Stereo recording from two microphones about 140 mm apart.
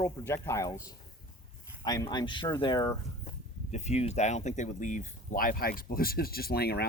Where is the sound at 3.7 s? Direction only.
55° left (ahead or behind); by 6.7 s 90° left.